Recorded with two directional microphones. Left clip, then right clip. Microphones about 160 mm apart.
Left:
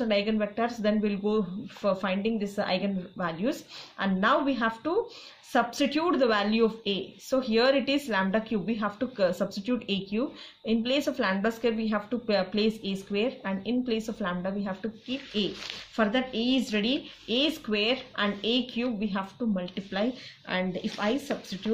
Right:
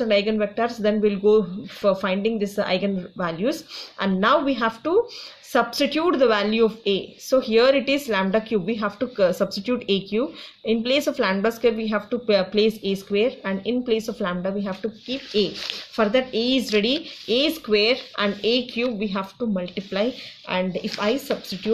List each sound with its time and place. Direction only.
0.0 s a woman's voice: 25° right (ahead or behind)